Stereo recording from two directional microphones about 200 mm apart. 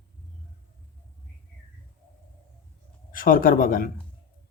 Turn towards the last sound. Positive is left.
turn(degrees=45)  # may be behind; listen again after turning